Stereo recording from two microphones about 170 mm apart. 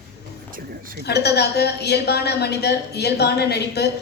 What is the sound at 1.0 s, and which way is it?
A woman's voice, 75° left (ahead or behind).